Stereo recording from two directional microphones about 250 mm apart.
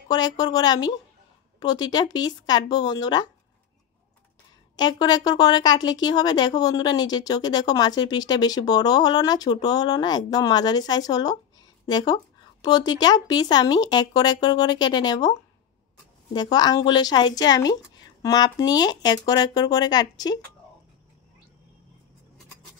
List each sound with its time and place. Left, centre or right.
0.1 s a woman's voice: centre
4.7 s a woman's voice: centre
16.3 s a woman's voice: centre